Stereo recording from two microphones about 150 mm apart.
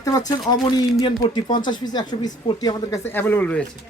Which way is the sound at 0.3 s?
25° left (ahead or behind).